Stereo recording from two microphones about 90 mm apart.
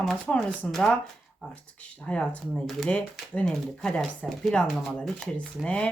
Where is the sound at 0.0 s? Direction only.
5° left (ahead or behind).